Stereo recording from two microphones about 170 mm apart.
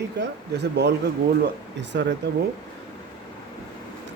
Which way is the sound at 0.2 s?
90° right.